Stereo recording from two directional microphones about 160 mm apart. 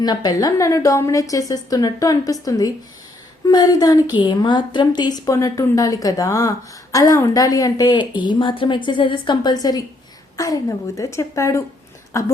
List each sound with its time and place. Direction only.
0.0 s a woman's voice: 25° left (ahead or behind)